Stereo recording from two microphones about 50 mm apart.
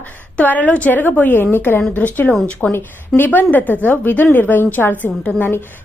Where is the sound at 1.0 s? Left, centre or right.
Left.